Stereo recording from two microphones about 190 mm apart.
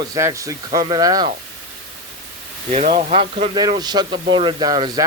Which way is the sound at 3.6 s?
20° right (ahead or behind).